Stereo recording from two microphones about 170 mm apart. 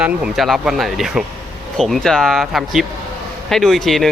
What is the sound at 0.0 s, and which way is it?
Speech, 5° right (ahead or behind).